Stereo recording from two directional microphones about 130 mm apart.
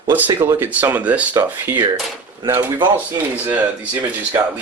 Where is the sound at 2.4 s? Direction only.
35° right (ahead or behind).